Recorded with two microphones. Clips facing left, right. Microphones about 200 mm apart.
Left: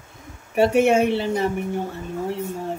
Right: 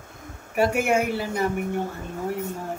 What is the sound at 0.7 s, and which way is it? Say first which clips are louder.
Speech: left 6 dB; 25° left (ahead or behind).